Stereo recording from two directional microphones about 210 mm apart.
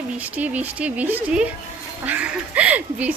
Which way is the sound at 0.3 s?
5° right (ahead or behind).